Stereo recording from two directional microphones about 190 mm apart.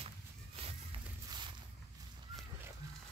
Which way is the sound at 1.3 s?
25° right (ahead or behind).